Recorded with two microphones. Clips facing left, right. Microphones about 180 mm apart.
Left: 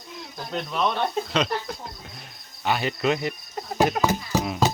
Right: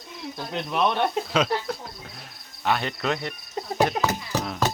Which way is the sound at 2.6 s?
5° left (ahead or behind).